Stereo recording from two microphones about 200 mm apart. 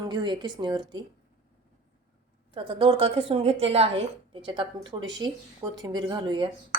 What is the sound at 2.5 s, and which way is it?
Speech, 25° right (ahead or behind).